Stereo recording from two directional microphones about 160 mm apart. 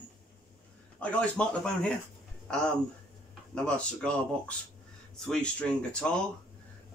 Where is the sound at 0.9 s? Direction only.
5° left (ahead or behind).